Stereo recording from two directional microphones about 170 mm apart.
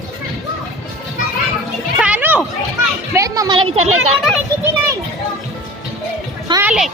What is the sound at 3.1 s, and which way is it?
Speech, 20° right (ahead or behind).